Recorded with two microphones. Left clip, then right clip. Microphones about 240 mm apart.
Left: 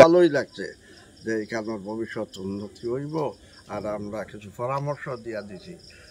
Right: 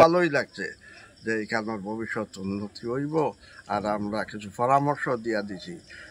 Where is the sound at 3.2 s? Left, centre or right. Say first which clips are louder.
Right 2 dB; right.